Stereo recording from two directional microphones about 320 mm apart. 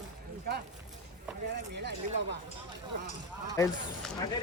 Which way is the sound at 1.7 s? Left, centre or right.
Right.